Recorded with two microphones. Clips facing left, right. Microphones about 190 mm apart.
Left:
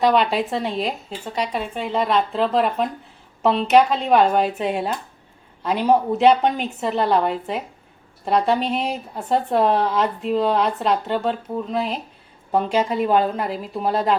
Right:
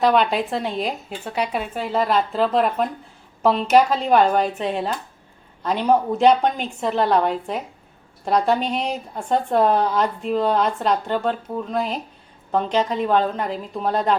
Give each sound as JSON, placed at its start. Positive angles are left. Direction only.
{"t": 0.0, "sound": "a woman's voice", "side_deg": 0}